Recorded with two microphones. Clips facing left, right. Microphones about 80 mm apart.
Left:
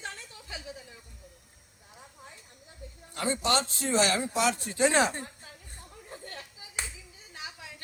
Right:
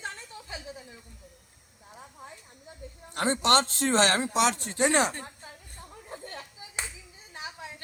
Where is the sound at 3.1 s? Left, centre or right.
Right.